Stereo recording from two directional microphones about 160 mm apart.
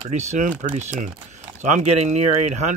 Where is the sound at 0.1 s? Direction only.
45° right (ahead or behind).